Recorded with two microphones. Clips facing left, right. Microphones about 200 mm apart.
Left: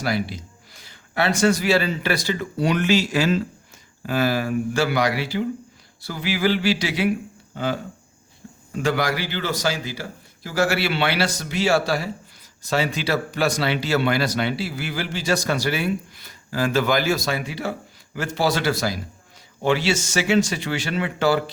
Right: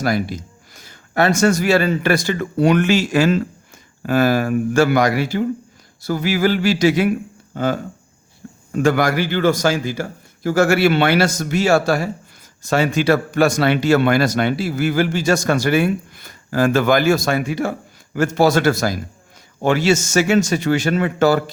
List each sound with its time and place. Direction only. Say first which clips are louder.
0.0 s speech: right 5 dB; 45° right (ahead or behind)